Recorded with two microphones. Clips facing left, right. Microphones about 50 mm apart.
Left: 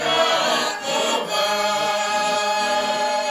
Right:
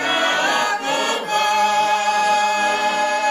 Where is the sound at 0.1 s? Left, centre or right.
Right.